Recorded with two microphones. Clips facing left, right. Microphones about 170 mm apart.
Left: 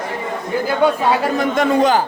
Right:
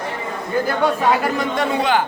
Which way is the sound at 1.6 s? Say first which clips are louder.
Left 5 dB; 40° left (ahead or behind).